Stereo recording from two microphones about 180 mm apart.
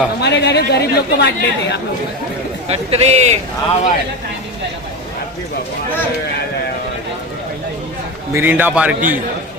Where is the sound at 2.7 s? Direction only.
35° right (ahead or behind).